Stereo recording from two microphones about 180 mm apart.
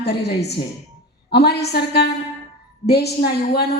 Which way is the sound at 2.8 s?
65° left (ahead or behind).